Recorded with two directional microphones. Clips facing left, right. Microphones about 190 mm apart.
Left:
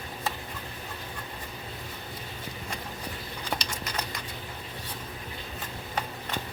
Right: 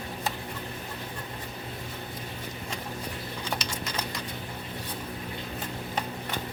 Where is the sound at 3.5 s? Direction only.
Centre (ahead or behind).